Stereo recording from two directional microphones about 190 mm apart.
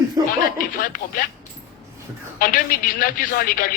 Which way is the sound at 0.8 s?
45° left (ahead or behind).